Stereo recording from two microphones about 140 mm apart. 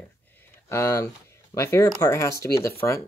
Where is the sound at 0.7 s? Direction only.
20° left (ahead or behind).